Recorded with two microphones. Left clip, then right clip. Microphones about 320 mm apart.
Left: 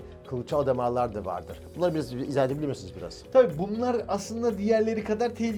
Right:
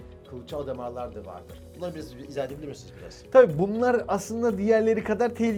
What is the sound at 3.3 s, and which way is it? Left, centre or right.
Speech, right.